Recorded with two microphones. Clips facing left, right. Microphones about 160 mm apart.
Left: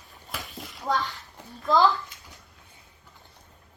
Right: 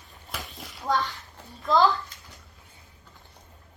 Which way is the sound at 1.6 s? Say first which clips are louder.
Even; centre (ahead or behind).